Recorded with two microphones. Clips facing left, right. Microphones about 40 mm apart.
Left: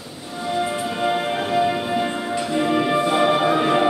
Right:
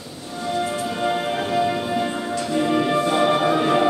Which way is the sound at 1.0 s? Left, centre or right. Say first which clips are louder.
Left 1 dB; centre.